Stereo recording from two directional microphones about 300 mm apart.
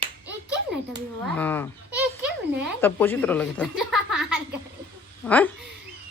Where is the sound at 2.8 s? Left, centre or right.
Centre.